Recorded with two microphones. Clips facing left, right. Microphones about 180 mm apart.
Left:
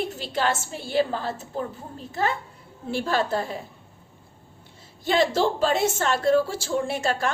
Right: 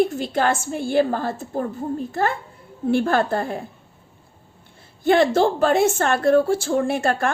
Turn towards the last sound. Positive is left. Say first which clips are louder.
# right 5 dB
turn(degrees=-55)  # may be behind; listen again after turning